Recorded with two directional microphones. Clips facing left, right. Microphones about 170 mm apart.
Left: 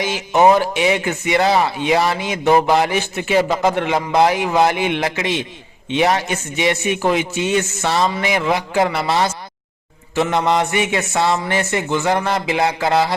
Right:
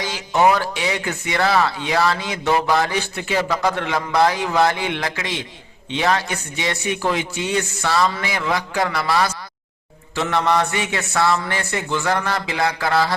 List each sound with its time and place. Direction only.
0.0 s a man's voice: 20° left (ahead or behind)